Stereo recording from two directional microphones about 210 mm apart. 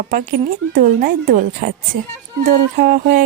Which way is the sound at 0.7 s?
40° right (ahead or behind).